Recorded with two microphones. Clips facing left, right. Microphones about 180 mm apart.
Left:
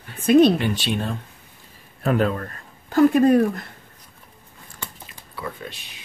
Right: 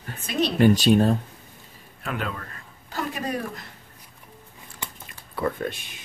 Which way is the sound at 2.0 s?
40° left (ahead or behind).